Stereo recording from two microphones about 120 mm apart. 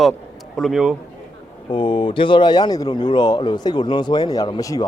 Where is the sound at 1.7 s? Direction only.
45° left (ahead or behind); by 4.8 s 30° left (ahead or behind).